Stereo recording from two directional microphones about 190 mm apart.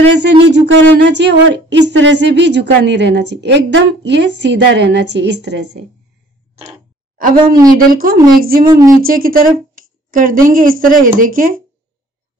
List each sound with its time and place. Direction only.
0.1 s a woman's voice: 65° right (ahead or behind)
7.9 s speech: 50° right (ahead or behind)
8.6 s speech: 20° right (ahead or behind)
9.0 s speech: 50° right (ahead or behind)